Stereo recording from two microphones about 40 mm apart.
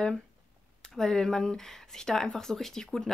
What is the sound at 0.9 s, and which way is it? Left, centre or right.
Speech, centre.